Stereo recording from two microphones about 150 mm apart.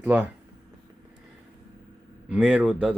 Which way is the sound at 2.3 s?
10° right (ahead or behind).